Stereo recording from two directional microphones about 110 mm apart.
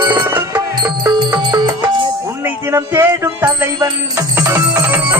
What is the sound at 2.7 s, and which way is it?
Speech, 20° right (ahead or behind).